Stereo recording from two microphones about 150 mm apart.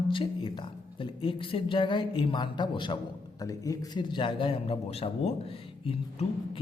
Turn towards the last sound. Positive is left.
turn(degrees=40)  # may be behind; listen again after turning